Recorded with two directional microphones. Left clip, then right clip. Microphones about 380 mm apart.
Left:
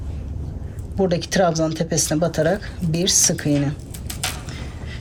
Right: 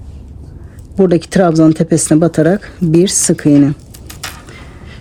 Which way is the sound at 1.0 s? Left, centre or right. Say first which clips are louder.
Right 7 dB; centre.